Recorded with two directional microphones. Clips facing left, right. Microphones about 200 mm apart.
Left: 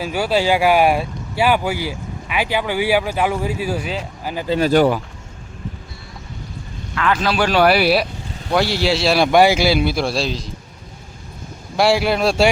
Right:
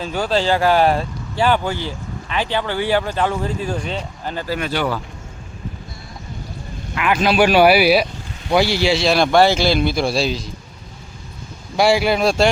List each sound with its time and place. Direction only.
0.0 s speech: 10° left (ahead or behind)
4.4 s speech: 25° left (ahead or behind)
6.9 s a man's voice: 15° right (ahead or behind)
11.8 s speech: centre (ahead or behind)